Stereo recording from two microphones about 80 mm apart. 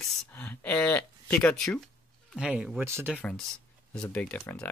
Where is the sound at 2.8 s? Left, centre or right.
Right.